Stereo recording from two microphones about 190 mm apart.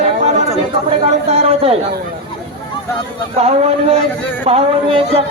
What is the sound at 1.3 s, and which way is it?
Speech, 30° right (ahead or behind).